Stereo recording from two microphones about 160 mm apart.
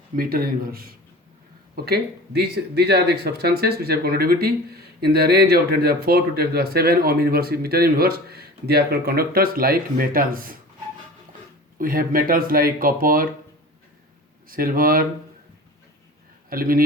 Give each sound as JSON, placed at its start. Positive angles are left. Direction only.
{"t": 0.2, "sound": "speech", "side_deg": -65}
{"t": 1.7, "sound": "speech", "side_deg": -80}
{"t": 11.8, "sound": "speech", "side_deg": -65}
{"t": 14.4, "sound": "speech", "side_deg": -65}
{"t": 16.5, "sound": "speech", "side_deg": -65}